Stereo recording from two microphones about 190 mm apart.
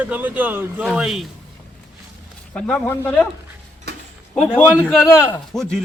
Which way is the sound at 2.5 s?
5° left (ahead or behind).